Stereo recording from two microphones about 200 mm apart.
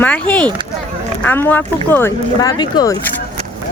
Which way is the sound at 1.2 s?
10° left (ahead or behind).